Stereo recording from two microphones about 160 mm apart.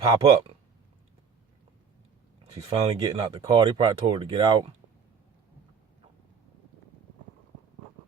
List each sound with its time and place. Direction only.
0.0 s speech: 25° right (ahead or behind)
2.5 s speech: 25° right (ahead or behind)